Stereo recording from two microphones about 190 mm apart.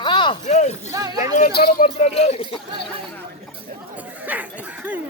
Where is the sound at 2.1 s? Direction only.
35° left (ahead or behind).